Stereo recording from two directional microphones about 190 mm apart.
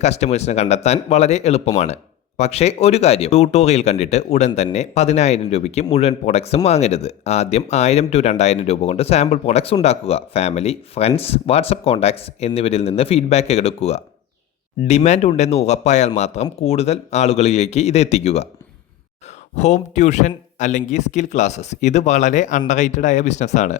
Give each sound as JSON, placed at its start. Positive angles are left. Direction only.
{"t": 0.0, "sound": "speech", "side_deg": 35}
{"t": 19.5, "sound": "speech", "side_deg": 35}